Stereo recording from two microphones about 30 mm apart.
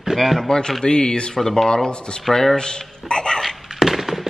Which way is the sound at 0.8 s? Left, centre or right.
Left.